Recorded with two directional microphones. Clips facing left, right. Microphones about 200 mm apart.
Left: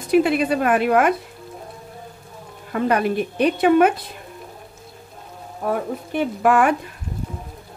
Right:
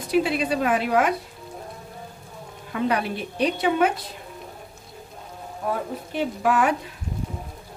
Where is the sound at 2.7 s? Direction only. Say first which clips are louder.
Left 5 dB; 50° left (ahead or behind).